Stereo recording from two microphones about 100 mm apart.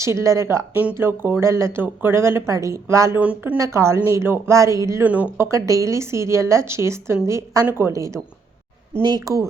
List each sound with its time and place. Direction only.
0.0 s speech: 30° right (ahead or behind)
3.2 s speech: 15° right (ahead or behind)
3.6 s speech: 30° right (ahead or behind)
5.0 s speech: 15° right (ahead or behind)
5.5 s speech: 30° right (ahead or behind)